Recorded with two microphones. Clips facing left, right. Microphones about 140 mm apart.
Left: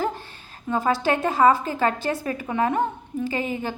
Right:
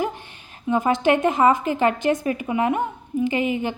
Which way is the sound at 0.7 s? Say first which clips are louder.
Right 3 dB; 20° right (ahead or behind).